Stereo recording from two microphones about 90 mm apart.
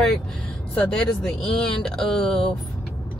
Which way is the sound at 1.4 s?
5° left (ahead or behind).